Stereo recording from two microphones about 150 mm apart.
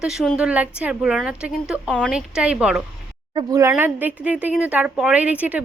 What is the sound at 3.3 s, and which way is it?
A woman's voice, 20° right (ahead or behind).